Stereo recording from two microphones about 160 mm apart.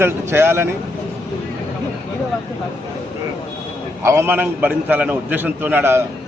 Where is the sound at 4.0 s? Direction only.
15° right (ahead or behind).